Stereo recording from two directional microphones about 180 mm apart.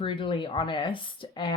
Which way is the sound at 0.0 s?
30° left (ahead or behind).